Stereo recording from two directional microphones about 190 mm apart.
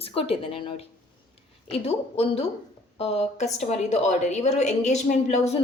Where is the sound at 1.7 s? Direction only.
30° left (ahead or behind).